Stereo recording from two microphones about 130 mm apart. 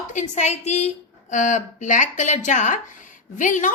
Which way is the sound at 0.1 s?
70° left (ahead or behind).